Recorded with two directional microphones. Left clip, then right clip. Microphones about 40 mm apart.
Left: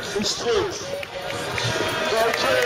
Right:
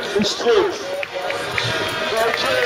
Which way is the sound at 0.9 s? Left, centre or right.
Centre.